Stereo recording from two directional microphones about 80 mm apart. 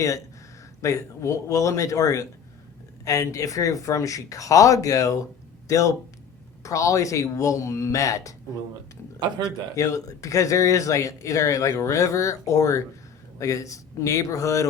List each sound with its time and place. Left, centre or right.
0.8 s speech: left
9.4 s speech: left